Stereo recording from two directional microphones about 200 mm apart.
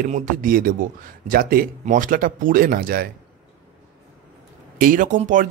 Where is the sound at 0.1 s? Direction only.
40° right (ahead or behind).